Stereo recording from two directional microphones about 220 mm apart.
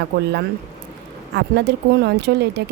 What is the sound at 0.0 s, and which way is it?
Speech, 50° right (ahead or behind).